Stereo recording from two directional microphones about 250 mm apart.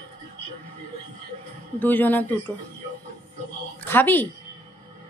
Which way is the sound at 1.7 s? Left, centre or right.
Centre.